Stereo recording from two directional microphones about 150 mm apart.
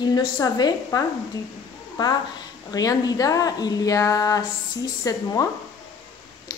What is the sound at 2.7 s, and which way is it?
Speech, 25° left (ahead or behind).